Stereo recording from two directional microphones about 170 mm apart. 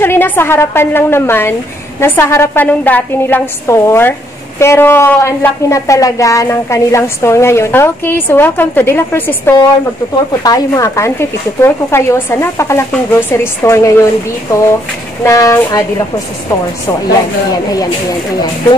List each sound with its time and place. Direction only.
0.0 s a woman's voice: 15° left (ahead or behind)
15.2 s a woman's voice: 15° left (ahead or behind)